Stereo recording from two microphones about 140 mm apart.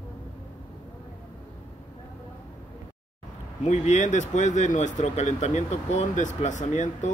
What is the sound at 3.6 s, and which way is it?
Speech, 55° left (ahead or behind).